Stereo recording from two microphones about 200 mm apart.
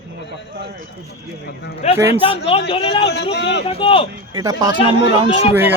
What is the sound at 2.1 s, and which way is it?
Speech, 25° left (ahead or behind).